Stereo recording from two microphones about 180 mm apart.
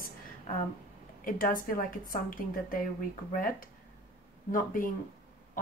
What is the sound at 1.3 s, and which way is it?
Speech, 50° left (ahead or behind).